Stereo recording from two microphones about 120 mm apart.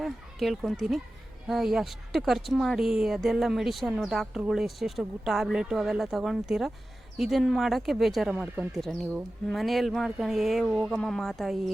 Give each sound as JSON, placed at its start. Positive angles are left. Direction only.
{"t": 0.0, "sound": "speech", "side_deg": 0}